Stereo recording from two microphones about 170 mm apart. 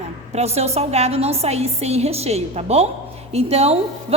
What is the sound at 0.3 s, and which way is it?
A woman's voice, 40° right (ahead or behind).